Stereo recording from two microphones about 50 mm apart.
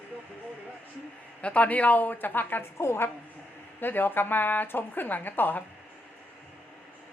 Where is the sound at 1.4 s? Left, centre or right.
Left.